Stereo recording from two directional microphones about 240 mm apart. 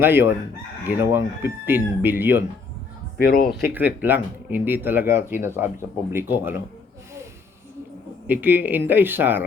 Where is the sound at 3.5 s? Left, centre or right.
Centre.